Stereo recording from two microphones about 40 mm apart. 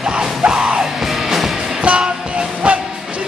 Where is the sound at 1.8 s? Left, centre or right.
Right.